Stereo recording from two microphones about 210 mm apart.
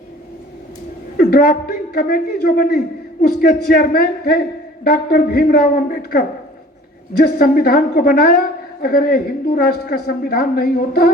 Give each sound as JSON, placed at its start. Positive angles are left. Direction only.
{"t": 1.1, "sound": "a woman's voice", "side_deg": 45}